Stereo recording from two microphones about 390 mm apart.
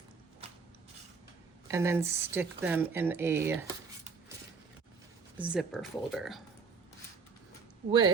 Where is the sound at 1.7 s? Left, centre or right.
Centre.